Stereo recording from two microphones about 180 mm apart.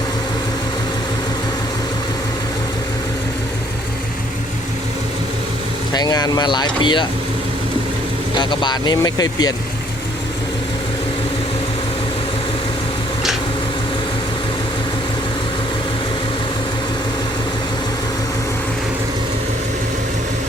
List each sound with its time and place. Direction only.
5.9 s speech: 20° left (ahead or behind)
8.4 s speech: 25° left (ahead or behind)